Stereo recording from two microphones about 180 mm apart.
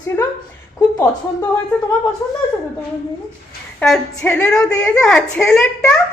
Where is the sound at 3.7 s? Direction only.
Centre (ahead or behind).